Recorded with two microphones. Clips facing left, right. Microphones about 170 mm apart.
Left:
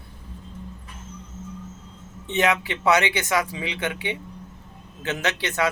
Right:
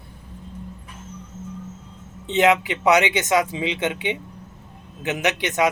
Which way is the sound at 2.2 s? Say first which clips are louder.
Right 5 dB; 20° right (ahead or behind).